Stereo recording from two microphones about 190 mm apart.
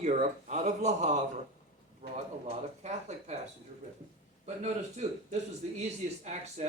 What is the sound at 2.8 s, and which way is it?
Speech, 35° right (ahead or behind).